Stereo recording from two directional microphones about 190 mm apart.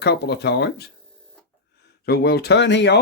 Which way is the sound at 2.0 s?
55° left (ahead or behind).